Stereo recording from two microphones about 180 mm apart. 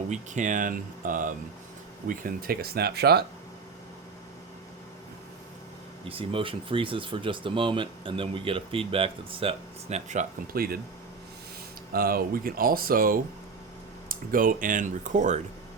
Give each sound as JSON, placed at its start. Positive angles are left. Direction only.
{"t": 0.1, "sound": "speech", "side_deg": -45}
{"t": 6.1, "sound": "speech", "side_deg": -30}
{"t": 11.9, "sound": "speech", "side_deg": -55}